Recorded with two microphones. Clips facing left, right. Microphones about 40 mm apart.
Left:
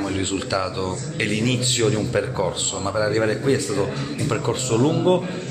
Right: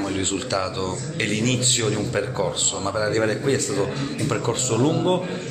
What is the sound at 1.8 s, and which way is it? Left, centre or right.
A man's voice, centre.